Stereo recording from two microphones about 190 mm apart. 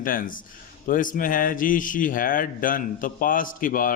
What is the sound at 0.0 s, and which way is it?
Speech, 45° left (ahead or behind).